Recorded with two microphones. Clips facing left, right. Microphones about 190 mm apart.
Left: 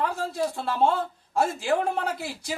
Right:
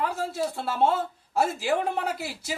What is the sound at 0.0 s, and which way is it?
A man's voice, centre (ahead or behind).